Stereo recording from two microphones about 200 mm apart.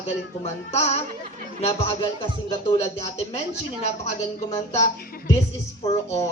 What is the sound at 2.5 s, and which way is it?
Speech, 25° left (ahead or behind).